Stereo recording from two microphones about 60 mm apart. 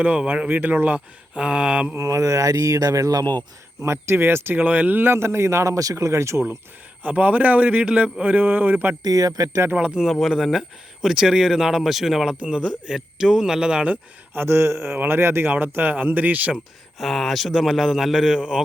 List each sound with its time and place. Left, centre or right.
0.0 s a man's voice: right
0.9 s speech: centre
2.0 s speech: right
3.8 s a man's voice: right
4.5 s a man's voice: right
5.1 s a man's voice: right
7.0 s a man's voice: right
9.0 s speech: right
9.7 s speech: centre
10.0 s speech: centre
12.3 s speech: centre
13.9 s a man's voice: right
17.0 s speech: centre
18.3 s speech: centre